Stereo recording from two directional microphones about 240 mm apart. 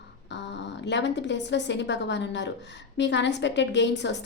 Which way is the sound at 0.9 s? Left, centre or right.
Left.